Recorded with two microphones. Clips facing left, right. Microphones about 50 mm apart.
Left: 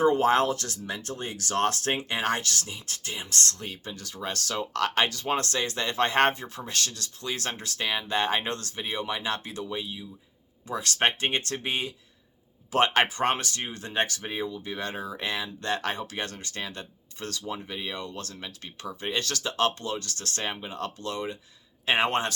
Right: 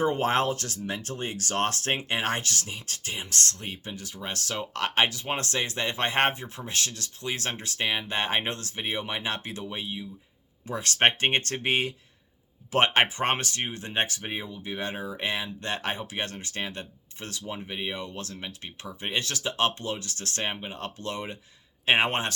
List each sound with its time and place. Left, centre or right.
0.0 s speech: right